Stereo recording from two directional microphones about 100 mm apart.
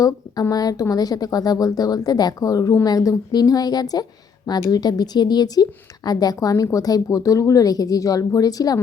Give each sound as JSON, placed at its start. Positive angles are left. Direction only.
{"t": 0.5, "sound": "a woman's voice", "side_deg": 40}